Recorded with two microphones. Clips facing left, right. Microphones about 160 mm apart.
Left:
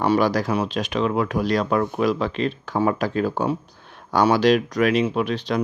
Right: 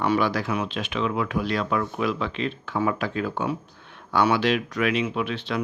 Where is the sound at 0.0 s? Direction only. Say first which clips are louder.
Left 4 dB; 35° left (ahead or behind).